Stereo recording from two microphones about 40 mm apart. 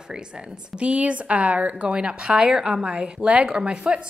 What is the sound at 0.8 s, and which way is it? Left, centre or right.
A woman's voice, right.